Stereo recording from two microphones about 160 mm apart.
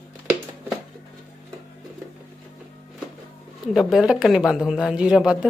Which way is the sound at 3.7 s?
5° right (ahead or behind).